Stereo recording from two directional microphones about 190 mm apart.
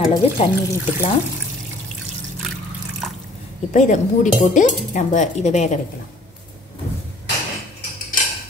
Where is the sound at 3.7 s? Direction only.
40° left (ahead or behind).